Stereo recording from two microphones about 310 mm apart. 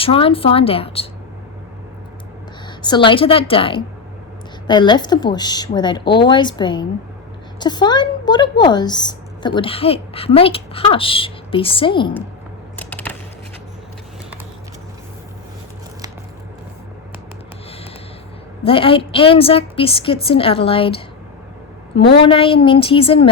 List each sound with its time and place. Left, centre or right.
0.0 s a woman's voice: centre
2.6 s a woman's voice: centre
12.7 s a sound: centre
18.6 s a woman's voice: centre
22.2 s a woman's voice: centre